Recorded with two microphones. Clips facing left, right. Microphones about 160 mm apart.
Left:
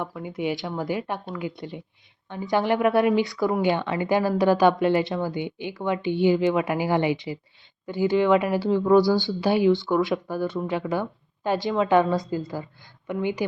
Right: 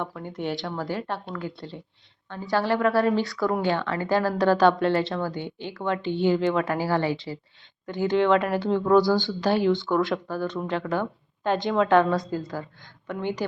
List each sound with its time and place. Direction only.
0.0 s a woman's voice: 5° left (ahead or behind)